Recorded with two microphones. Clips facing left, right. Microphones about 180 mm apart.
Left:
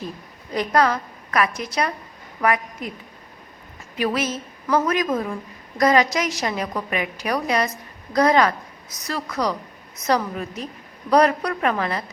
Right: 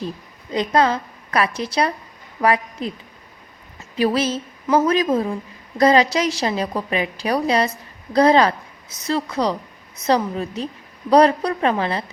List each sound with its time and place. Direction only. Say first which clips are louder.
0.5 s a woman's voice: right 2 dB; 25° right (ahead or behind)
3.9 s a woman's voice: right 4 dB; 30° right (ahead or behind)